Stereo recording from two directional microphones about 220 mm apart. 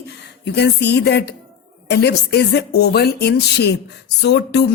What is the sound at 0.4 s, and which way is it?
Speech, 50° left (ahead or behind).